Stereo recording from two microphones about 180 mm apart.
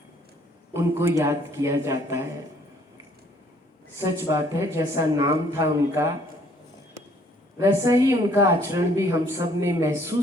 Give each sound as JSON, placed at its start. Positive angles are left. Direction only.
{"t": 0.7, "sound": "a woman's voice", "side_deg": -15}
{"t": 3.9, "sound": "a woman's voice", "side_deg": -15}
{"t": 7.6, "sound": "a woman's voice", "side_deg": -15}